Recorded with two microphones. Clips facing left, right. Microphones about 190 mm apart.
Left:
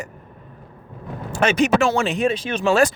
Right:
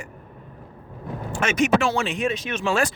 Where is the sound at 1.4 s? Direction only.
35° left (ahead or behind).